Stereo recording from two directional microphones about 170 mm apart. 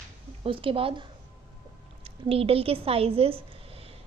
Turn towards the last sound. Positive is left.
turn(degrees=-35)  # may be behind; listen again after turning